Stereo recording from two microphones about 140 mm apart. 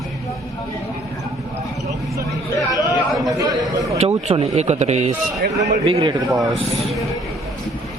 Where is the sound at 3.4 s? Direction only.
25° right (ahead or behind).